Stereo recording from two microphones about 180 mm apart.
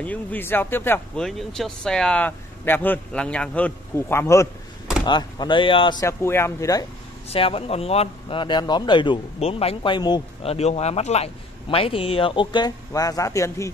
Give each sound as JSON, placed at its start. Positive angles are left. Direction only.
{"t": 0.0, "sound": "speech", "side_deg": 10}
{"t": 5.0, "sound": "speech", "side_deg": 25}
{"t": 7.2, "sound": "speech", "side_deg": 30}